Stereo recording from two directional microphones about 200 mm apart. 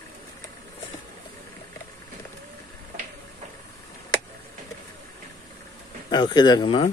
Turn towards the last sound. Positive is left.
turn(degrees=25)  # may be behind; listen again after turning